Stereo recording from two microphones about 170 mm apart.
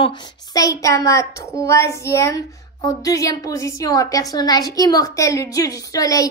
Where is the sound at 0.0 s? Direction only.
25° left (ahead or behind).